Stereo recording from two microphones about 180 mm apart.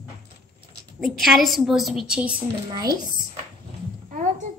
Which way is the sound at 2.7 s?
20° right (ahead or behind).